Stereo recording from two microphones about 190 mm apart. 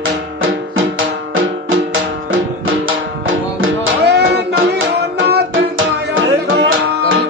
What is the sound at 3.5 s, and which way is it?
Music, 60° right (ahead or behind).